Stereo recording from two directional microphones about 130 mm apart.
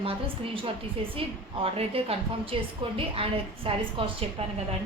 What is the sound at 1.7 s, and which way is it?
A woman's voice, 45° right (ahead or behind).